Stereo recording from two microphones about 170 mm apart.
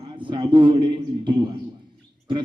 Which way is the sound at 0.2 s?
30° right (ahead or behind).